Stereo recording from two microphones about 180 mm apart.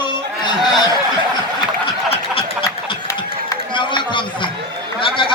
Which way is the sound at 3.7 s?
25° left (ahead or behind).